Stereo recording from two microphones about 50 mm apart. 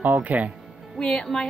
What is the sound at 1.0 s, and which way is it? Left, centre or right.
Speech, centre.